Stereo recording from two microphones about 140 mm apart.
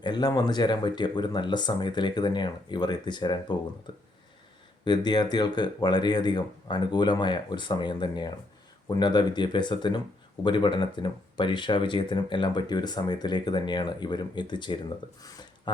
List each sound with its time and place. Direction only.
0.0 s speech: 30° left (ahead or behind)